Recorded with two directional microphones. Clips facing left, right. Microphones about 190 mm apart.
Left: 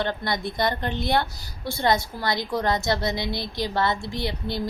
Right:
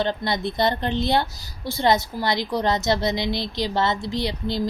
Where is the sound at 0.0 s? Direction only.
20° right (ahead or behind).